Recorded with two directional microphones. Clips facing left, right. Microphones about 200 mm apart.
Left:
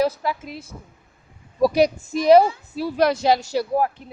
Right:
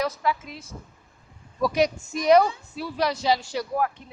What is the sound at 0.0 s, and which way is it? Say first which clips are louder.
Speech: left 4 dB; 35° left (ahead or behind).